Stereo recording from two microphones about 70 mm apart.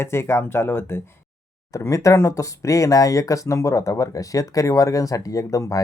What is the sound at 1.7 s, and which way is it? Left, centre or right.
Speech, left.